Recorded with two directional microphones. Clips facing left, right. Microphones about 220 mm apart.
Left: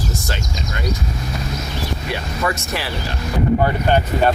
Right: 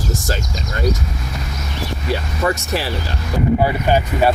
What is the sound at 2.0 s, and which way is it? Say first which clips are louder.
Speech: right 4 dB; 35° right (ahead or behind).